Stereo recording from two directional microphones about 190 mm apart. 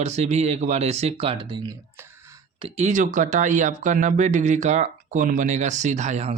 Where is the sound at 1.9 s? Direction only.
15° right (ahead or behind).